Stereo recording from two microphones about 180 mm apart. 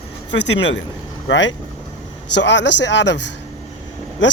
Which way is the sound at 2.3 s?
80° left.